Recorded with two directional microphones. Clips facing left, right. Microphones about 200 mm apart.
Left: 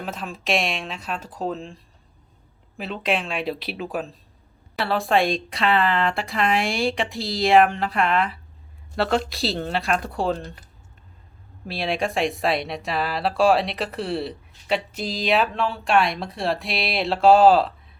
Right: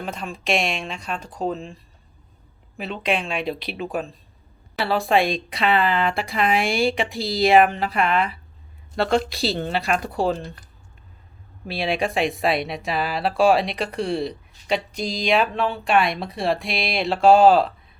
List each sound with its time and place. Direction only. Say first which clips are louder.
0.0 s speech: right 1 dB; centre (ahead or behind)
11.6 s speech: right 1 dB; centre (ahead or behind)